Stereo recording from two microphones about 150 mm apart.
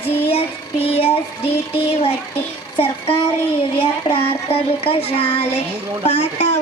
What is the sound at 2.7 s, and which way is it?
Child singing, 40° left (ahead or behind).